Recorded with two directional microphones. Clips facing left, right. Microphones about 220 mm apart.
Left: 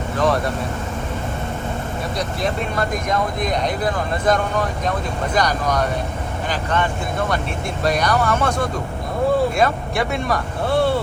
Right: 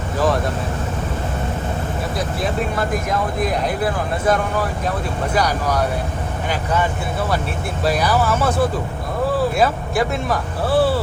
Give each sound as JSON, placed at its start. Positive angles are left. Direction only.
{"t": 0.2, "sound": "speech", "side_deg": 0}
{"t": 2.1, "sound": "speech", "side_deg": -5}